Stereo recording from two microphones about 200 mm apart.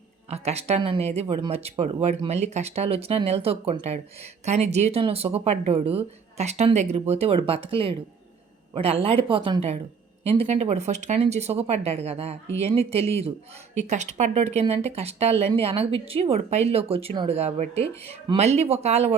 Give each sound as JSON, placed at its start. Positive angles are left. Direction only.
{"t": 0.3, "sound": "a woman's voice", "side_deg": -35}